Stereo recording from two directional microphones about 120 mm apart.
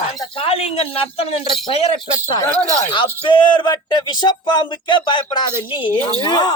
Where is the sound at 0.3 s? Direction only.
55° left (ahead or behind).